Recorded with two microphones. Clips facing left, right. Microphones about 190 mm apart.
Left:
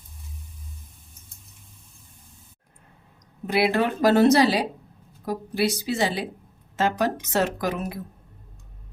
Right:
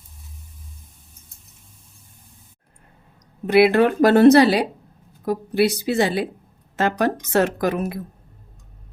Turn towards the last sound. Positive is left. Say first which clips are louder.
# right 5 dB
turn(degrees=-60)  # may be behind; listen again after turning